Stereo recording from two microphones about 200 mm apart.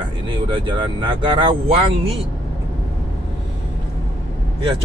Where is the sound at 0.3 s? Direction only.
25° right (ahead or behind).